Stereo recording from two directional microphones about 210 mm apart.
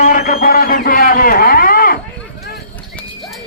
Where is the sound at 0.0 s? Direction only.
40° left (ahead or behind).